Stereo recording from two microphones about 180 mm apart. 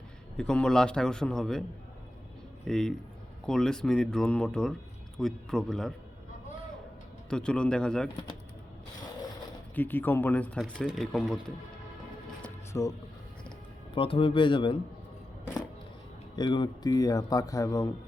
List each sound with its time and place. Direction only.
0.3 s speech: 5° left (ahead or behind)
2.6 s speech: 5° left (ahead or behind)
7.3 s speech: 5° left (ahead or behind)
9.7 s speech: 10° left (ahead or behind)
12.7 s speech: 15° left (ahead or behind)
13.9 s a man's voice: 30° left (ahead or behind)
16.3 s a man's voice: 25° left (ahead or behind)